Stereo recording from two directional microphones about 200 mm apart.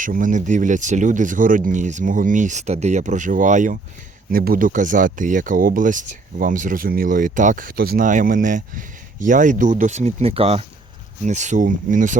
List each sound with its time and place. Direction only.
0.0 s speech: 40° right (ahead or behind)